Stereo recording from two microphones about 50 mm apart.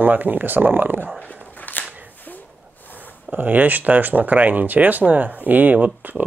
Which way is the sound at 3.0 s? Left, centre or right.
Right.